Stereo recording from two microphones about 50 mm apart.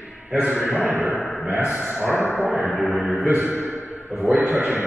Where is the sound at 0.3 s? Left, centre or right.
Right.